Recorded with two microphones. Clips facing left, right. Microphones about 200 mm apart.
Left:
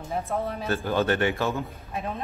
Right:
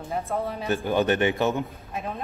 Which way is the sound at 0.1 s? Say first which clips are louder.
Even; centre (ahead or behind).